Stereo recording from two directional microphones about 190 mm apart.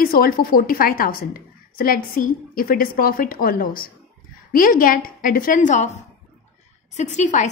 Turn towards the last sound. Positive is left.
turn(degrees=40)  # may be behind; listen again after turning